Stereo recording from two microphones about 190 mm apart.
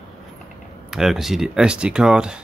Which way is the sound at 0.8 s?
Centre (ahead or behind).